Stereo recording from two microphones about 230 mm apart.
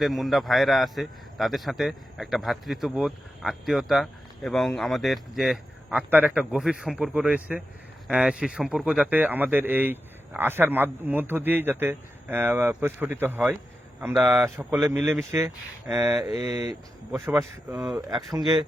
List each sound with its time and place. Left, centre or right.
0.0 s a man's voice: centre